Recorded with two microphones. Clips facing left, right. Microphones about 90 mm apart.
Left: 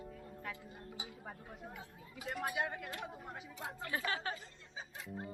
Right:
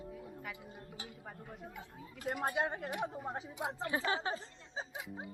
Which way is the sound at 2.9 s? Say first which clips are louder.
Right 7 dB; 15° right (ahead or behind).